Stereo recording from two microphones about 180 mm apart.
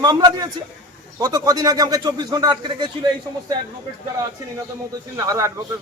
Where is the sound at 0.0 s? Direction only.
20° right (ahead or behind).